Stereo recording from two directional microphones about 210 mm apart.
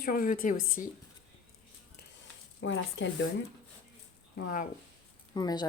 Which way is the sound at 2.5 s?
60° left (ahead or behind).